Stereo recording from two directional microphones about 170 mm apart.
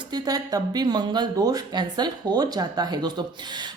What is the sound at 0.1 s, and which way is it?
A woman's voice, 20° right (ahead or behind).